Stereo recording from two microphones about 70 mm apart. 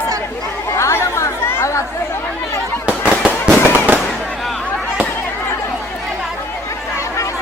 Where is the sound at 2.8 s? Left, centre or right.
Centre.